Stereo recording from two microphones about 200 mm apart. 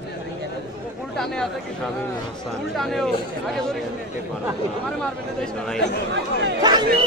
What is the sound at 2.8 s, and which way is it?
Speech, centre (ahead or behind).